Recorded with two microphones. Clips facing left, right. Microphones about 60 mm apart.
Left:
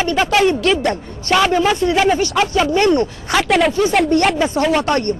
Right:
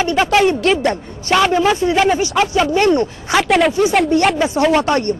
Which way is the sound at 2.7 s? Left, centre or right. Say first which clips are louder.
Even; right.